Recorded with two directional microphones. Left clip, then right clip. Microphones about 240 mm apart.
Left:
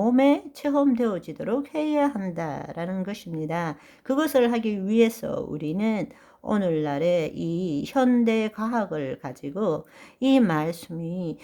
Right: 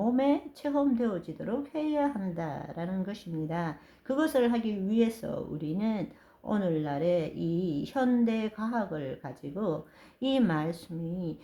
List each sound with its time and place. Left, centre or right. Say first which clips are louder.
0.0 s speech: left 7 dB; left